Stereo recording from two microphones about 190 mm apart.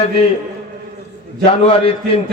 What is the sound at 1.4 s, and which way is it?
Speech, 30° left (ahead or behind).